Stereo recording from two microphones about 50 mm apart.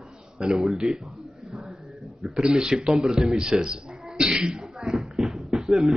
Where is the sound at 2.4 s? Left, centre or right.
Centre.